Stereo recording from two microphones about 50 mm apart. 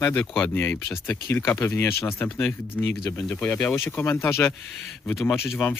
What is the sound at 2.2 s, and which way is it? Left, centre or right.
Speech, left.